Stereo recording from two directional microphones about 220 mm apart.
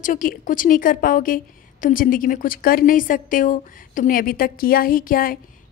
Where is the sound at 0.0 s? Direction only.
40° left (ahead or behind).